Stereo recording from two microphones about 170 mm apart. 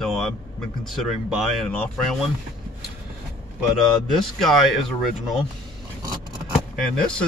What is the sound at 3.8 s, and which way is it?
Speech, centre (ahead or behind).